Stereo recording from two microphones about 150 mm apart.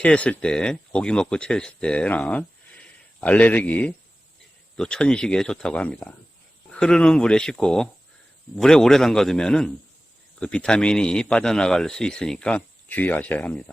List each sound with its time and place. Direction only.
0.0 s a man's voice: 10° left (ahead or behind)